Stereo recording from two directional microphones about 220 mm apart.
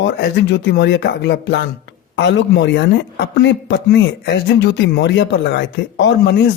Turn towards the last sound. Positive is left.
turn(degrees=50)  # may be behind; listen again after turning